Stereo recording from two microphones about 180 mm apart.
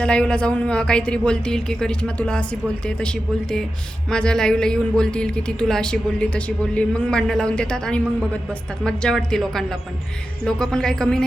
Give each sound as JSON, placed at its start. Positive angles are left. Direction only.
{"t": 0.0, "sound": "speech", "side_deg": 5}